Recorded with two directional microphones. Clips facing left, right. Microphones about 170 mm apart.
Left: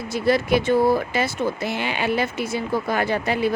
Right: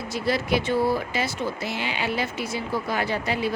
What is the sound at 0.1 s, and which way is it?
Speech, 50° left (ahead or behind).